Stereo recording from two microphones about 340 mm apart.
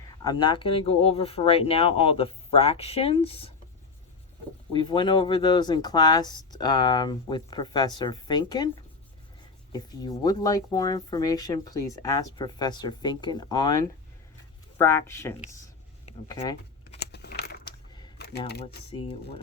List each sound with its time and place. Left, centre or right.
0.2 s speech: centre
4.7 s speech: centre
9.7 s speech: centre
16.0 s a sound: centre
17.0 s a sound: left
17.7 s coin: centre
18.9 s speech: centre